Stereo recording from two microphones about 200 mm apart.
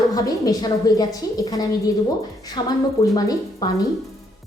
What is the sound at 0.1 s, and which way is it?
A woman's voice, 15° left (ahead or behind).